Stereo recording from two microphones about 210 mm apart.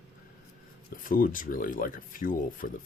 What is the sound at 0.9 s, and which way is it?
Speech, 40° left (ahead or behind).